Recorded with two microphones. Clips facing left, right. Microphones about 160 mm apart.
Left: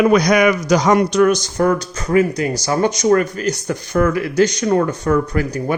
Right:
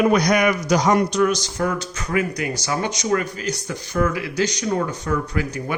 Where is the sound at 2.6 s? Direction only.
40° left (ahead or behind).